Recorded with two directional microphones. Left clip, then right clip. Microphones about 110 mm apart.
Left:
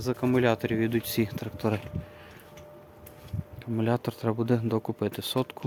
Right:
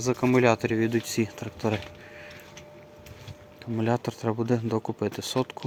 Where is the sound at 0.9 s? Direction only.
35° left (ahead or behind).